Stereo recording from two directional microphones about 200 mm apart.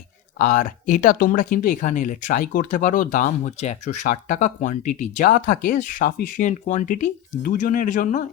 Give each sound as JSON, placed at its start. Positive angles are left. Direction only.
{"t": 0.3, "sound": "speech", "side_deg": 40}